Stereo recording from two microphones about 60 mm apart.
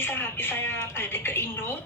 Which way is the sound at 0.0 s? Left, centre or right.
Left.